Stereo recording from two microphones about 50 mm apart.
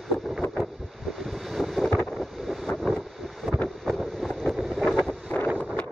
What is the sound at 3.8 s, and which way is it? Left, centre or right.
Vehicle, centre.